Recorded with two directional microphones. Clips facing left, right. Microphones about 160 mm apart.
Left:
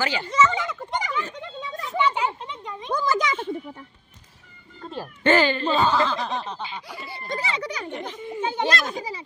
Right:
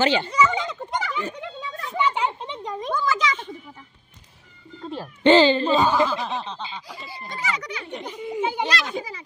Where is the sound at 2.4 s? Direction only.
30° right (ahead or behind).